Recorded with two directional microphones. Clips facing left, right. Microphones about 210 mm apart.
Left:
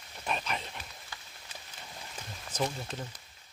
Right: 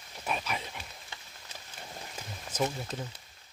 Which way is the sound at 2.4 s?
10° right (ahead or behind).